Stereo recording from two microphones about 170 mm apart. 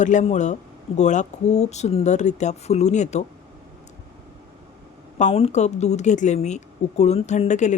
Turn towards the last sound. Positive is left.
turn(degrees=45)  # may be behind; listen again after turning